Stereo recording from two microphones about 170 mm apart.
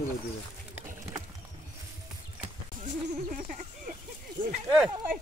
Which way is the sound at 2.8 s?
50° right (ahead or behind).